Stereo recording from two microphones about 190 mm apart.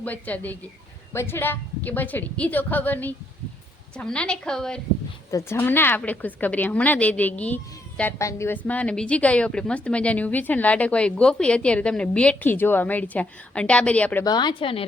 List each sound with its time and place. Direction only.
0.0 s a woman's voice: 10° left (ahead or behind)
14.3 s a woman's voice: 25° left (ahead or behind)